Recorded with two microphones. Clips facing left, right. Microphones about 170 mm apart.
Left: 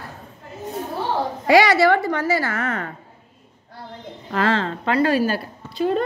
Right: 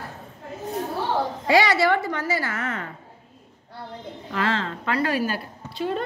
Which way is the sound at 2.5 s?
50° left (ahead or behind).